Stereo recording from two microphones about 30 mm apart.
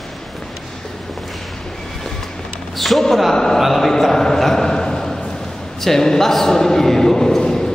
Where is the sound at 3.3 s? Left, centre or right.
Centre.